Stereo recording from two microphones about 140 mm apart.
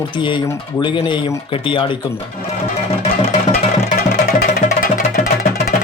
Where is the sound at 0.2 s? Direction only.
35° left (ahead or behind).